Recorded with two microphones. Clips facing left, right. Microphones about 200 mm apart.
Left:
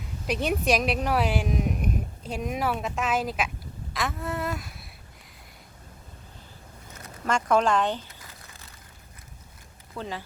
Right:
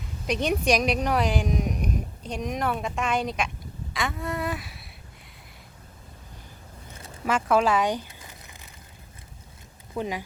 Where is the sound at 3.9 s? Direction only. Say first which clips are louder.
Right 1 dB; centre (ahead or behind).